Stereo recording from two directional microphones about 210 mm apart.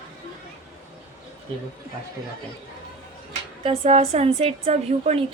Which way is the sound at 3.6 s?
30° right (ahead or behind).